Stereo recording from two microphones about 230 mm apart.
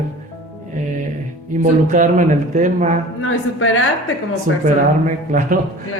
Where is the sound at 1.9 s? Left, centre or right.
Right.